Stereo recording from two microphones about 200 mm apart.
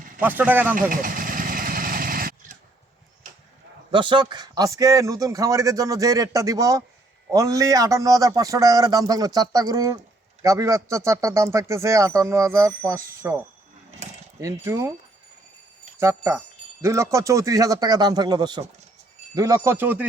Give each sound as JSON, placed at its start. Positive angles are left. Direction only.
{"t": 0.2, "sound": "speech", "side_deg": -10}
{"t": 0.8, "sound": "vehicle", "side_deg": -45}
{"t": 3.9, "sound": "speech", "side_deg": -25}
{"t": 14.4, "sound": "speech", "side_deg": -15}
{"t": 16.0, "sound": "speech", "side_deg": -15}